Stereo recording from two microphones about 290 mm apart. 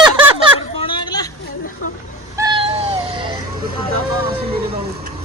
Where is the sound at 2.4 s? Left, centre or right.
Centre.